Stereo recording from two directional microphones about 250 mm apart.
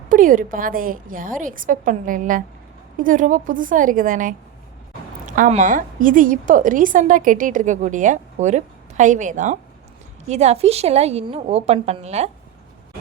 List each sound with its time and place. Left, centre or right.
0.1 s a woman's voice: right